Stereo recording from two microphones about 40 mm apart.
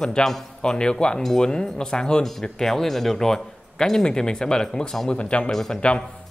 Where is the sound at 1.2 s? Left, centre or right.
Centre.